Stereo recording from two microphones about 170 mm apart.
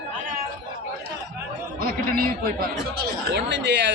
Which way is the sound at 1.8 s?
60° right (ahead or behind).